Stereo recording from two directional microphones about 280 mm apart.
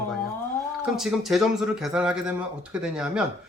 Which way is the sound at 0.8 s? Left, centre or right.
Centre.